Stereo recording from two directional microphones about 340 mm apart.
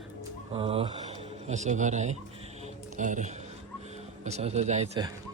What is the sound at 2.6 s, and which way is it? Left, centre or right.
Music, right.